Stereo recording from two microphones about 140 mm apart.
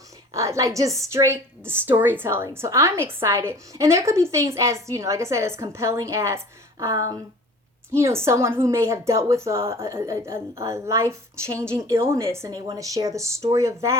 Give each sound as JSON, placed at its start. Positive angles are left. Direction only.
{"t": 0.3, "sound": "a woman's voice", "side_deg": -20}